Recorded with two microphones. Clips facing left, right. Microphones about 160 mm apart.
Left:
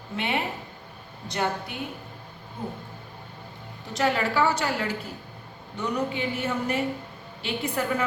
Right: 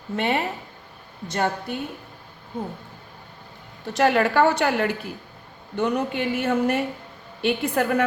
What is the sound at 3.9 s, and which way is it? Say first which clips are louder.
A woman's voice: right 5 dB; 70° right (ahead or behind).